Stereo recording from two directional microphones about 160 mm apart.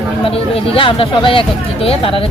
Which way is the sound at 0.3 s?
35° left (ahead or behind).